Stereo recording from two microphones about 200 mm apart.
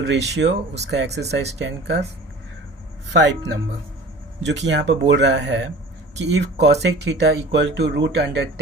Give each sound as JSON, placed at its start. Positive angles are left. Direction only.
{"t": 0.0, "sound": "speech", "side_deg": -60}
{"t": 3.1, "sound": "speech", "side_deg": -60}